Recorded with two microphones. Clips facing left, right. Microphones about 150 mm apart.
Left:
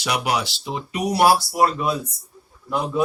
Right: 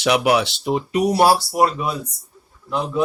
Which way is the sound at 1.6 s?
10° right (ahead or behind).